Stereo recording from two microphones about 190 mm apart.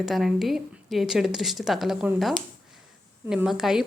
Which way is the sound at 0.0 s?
Centre (ahead or behind).